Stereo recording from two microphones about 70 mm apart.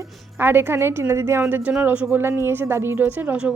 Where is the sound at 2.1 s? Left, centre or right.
Right.